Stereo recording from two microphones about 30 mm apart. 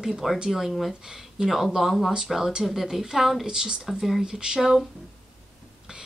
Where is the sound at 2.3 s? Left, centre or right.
Centre.